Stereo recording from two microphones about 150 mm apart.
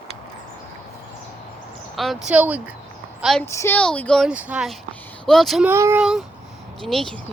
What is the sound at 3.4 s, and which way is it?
Speech, 15° left (ahead or behind).